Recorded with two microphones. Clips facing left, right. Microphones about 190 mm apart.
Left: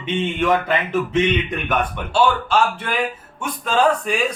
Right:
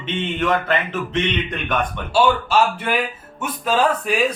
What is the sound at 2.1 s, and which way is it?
Speech, 10° right (ahead or behind).